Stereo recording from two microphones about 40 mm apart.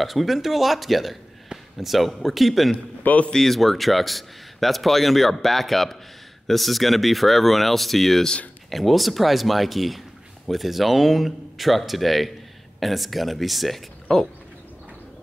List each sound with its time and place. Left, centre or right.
0.0 s a man's voice: centre
3.0 s a man's voice: left
3.3 s speech: centre
14.1 s speech: centre